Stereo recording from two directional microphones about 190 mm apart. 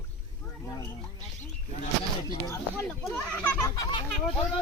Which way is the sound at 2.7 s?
5° left (ahead or behind).